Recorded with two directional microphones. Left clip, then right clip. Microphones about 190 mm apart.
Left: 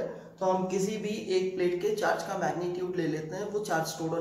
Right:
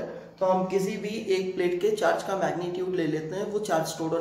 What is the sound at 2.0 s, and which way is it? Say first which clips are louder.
Speech: right 4 dB; 35° right (ahead or behind).